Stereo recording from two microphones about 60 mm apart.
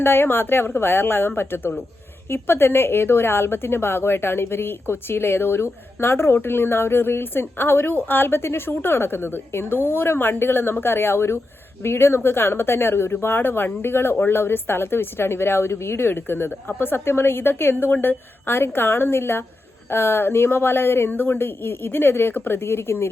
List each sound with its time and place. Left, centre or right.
0.0 s a woman's voice: left